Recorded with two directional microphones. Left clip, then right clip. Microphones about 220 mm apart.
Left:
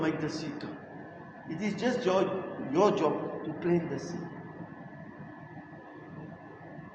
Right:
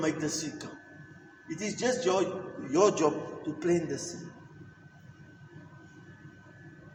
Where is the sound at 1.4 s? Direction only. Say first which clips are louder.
Right 1 dB; 30° right (ahead or behind).